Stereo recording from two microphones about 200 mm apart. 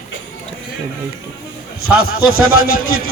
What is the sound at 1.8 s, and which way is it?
A man's voice, 90° left.